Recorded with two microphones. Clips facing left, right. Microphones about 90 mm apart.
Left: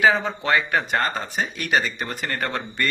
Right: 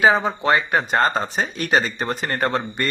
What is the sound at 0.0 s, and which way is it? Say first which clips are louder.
Speech: right 3 dB; 20° right (ahead or behind).